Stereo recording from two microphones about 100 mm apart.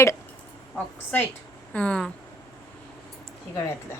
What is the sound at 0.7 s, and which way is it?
A woman's voice, 20° left (ahead or behind).